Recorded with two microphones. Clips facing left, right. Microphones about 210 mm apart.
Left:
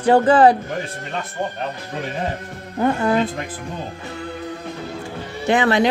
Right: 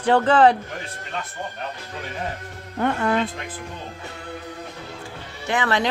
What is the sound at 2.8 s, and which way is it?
Speech, 10° left (ahead or behind).